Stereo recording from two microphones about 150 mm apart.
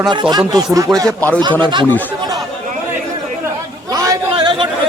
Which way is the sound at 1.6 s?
30° right (ahead or behind).